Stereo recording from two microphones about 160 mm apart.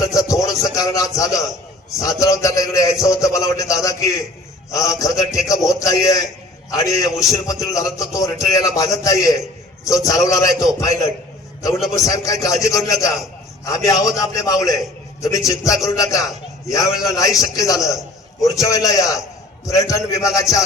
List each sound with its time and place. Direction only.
0.0 s a sound: 20° left (ahead or behind)
0.8 s a man's voice: 20° left (ahead or behind)
6.7 s a man's voice: 20° left (ahead or behind)